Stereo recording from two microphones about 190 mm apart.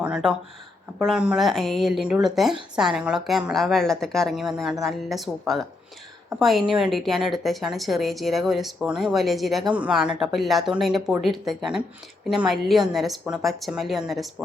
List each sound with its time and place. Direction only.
0.0 s speech: 5° right (ahead or behind)